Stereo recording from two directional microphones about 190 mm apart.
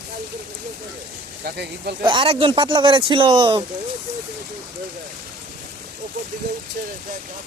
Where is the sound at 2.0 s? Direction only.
30° right (ahead or behind).